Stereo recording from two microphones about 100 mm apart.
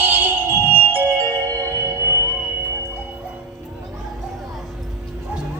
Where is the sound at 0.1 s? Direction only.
20° right (ahead or behind).